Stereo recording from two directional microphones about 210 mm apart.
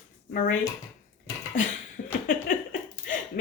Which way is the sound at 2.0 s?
40° left (ahead or behind).